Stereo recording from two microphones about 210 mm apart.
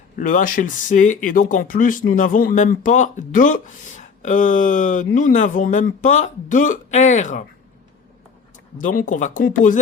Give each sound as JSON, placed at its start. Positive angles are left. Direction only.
{"t": 0.2, "sound": "speech", "side_deg": 40}
{"t": 8.8, "sound": "speech", "side_deg": 40}